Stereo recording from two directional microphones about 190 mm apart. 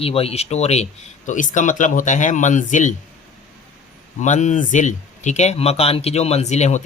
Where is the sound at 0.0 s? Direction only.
30° left (ahead or behind).